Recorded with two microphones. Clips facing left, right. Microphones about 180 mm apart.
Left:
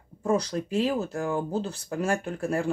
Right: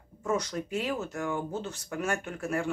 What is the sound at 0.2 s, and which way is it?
Speech, 30° left (ahead or behind).